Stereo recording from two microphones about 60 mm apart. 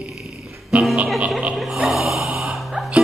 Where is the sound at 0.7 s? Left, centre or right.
Centre.